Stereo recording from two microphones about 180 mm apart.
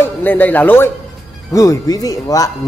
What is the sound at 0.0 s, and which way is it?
Speech, 10° left (ahead or behind).